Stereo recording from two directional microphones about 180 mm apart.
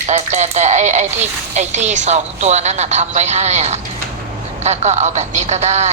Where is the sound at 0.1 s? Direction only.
40° right (ahead or behind).